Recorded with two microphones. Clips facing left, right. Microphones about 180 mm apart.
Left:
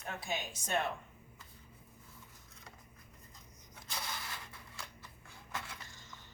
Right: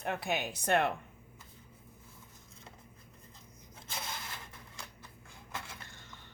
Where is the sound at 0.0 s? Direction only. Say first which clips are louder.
Right 6 dB; 60° right (ahead or behind).